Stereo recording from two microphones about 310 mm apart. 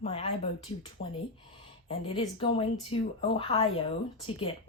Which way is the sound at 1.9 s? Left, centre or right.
Centre.